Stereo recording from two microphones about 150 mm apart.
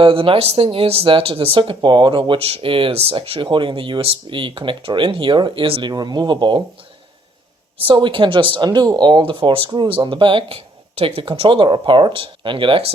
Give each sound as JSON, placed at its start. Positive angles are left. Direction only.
{"t": 0.0, "sound": "speech", "side_deg": -35}
{"t": 7.9, "sound": "speech", "side_deg": -35}